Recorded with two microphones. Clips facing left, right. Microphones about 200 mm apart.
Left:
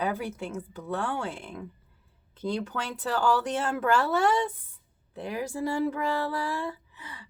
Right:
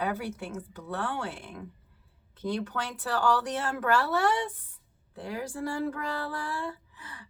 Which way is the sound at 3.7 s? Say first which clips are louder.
Left 1 dB; 20° left (ahead or behind).